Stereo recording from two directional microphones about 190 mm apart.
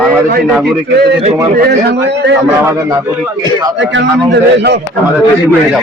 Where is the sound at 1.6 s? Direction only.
60° right (ahead or behind).